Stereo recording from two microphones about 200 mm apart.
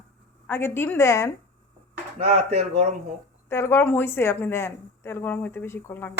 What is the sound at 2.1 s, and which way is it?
Speech, 30° right (ahead or behind).